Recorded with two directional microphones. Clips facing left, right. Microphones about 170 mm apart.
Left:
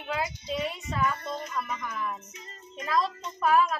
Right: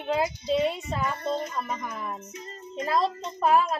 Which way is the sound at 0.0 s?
30° right (ahead or behind).